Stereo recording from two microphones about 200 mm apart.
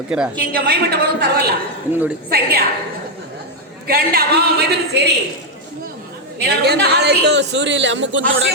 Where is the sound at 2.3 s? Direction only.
50° right (ahead or behind).